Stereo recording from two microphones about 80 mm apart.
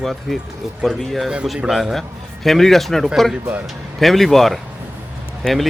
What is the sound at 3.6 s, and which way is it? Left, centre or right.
Speech, centre.